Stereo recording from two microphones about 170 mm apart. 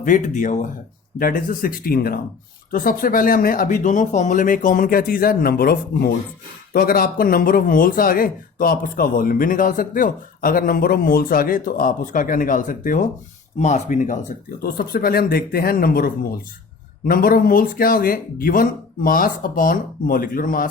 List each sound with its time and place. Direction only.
0.0 s speech: 50° left (ahead or behind)
14.6 s speech: 60° left (ahead or behind)